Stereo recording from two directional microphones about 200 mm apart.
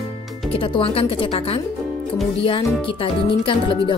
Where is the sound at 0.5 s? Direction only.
25° left (ahead or behind).